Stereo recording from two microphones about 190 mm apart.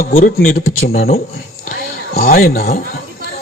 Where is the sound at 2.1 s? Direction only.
50° left (ahead or behind).